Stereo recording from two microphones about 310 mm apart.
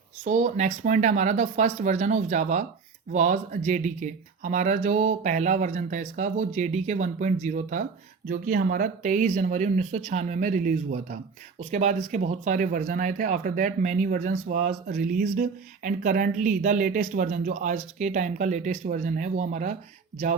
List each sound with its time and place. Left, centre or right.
0.3 s speech: right